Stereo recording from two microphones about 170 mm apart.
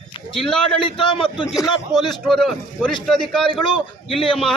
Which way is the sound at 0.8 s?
30° left (ahead or behind).